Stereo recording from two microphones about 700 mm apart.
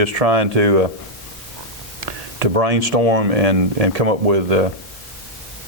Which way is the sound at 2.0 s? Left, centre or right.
Right.